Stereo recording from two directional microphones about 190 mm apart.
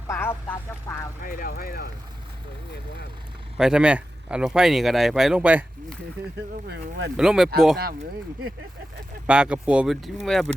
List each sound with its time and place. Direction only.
0.1 s speech: 10° left (ahead or behind)
1.2 s speech: 50° left (ahead or behind)
3.6 s speech: 5° right (ahead or behind)
6.7 s speech: 60° right (ahead or behind)
7.2 s speech: centre (ahead or behind)
9.2 s speech: 5° right (ahead or behind)